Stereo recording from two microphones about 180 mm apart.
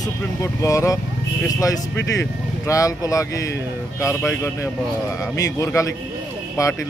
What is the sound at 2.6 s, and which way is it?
Speech, 20° left (ahead or behind).